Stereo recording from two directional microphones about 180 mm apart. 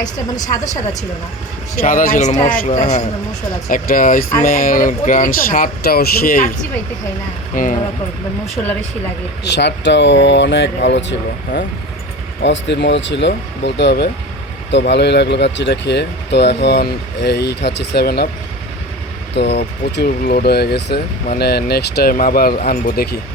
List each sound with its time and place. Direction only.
0.3 s a woman's voice: 20° left (ahead or behind)
1.8 s speech: 50° left (ahead or behind)
7.5 s speech: 45° left (ahead or behind)
9.4 s speech: 70° left (ahead or behind)
12.4 s speech: 80° left; by 18.3 s 60° left (ahead or behind)
19.3 s speech: 70° left (ahead or behind)